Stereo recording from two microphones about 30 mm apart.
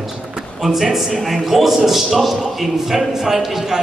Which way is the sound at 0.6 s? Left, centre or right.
Centre.